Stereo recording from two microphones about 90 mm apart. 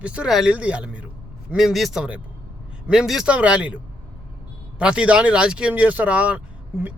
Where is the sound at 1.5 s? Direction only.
Centre (ahead or behind).